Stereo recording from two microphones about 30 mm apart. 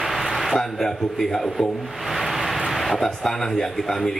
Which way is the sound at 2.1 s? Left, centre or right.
Centre.